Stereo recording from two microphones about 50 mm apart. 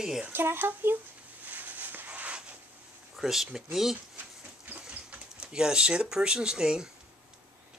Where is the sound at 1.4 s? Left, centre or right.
Right.